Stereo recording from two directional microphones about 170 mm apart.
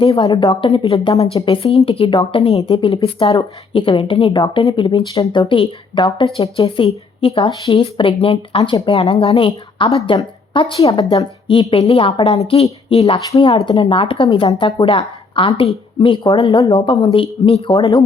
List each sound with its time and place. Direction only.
0.0 s speech: 35° left (ahead or behind)